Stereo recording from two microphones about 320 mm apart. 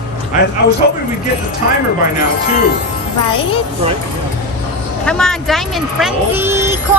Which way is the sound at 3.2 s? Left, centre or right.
Centre.